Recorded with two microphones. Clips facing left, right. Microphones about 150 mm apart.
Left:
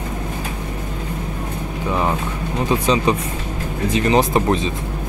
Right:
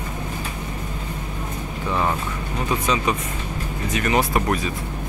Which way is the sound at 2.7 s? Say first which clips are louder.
Left 5 dB; 30° left (ahead or behind).